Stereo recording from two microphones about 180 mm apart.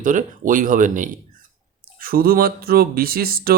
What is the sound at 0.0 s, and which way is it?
Speech, 45° right (ahead or behind).